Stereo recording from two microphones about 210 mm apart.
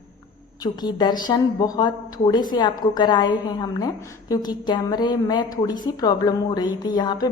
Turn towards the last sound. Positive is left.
turn(degrees=20)  # may be behind; listen again after turning